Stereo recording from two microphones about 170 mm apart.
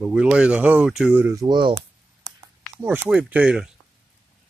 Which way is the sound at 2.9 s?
10° right (ahead or behind).